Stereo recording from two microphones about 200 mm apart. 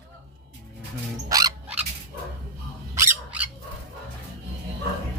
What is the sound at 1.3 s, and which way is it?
Music, 20° right (ahead or behind).